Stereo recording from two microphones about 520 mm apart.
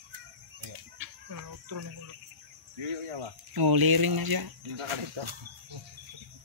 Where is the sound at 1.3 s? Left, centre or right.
Right.